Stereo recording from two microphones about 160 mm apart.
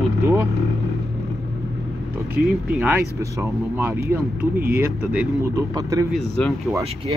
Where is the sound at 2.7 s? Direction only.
15° right (ahead or behind).